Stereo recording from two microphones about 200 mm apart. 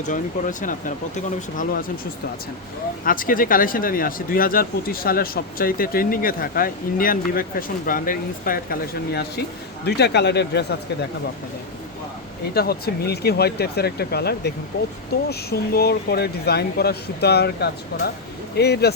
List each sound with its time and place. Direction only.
0.1 s speech: 40° left (ahead or behind)
3.0 s speech: 45° left (ahead or behind)
12.5 s speech: 50° left (ahead or behind)